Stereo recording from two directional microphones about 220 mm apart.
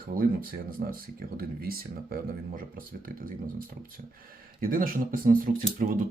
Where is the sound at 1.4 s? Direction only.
40° right (ahead or behind).